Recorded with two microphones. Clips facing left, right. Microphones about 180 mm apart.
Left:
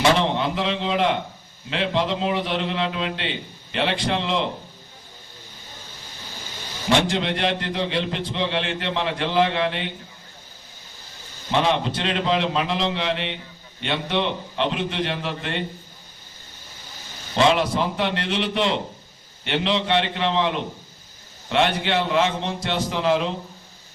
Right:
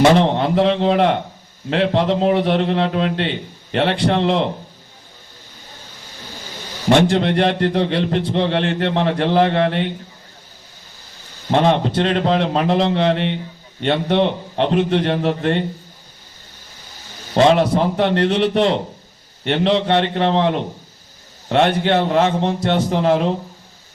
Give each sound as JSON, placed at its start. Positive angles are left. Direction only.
{"t": 0.2, "sound": "a man's voice", "side_deg": -50}
{"t": 6.8, "sound": "a man's voice", "side_deg": -55}
{"t": 11.5, "sound": "a man's voice", "side_deg": -50}
{"t": 17.3, "sound": "a man's voice", "side_deg": -50}